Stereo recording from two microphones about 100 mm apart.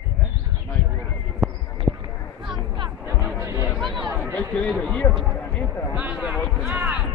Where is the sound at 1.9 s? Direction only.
10° right (ahead or behind).